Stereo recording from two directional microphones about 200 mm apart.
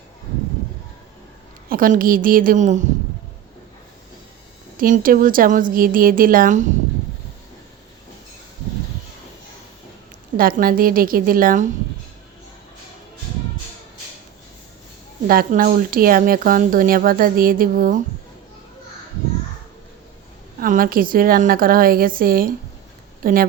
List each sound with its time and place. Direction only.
1.7 s speech: 45° right (ahead or behind)
4.8 s speech: 45° right (ahead or behind)
10.6 s speech: 45° right (ahead or behind)
15.3 s speech: 45° right (ahead or behind)
20.6 s speech: 45° right (ahead or behind)